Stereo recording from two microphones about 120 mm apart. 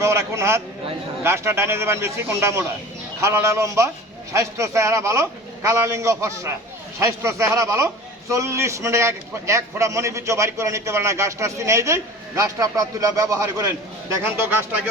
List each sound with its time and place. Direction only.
0.0 s a man's voice: 25° right (ahead or behind)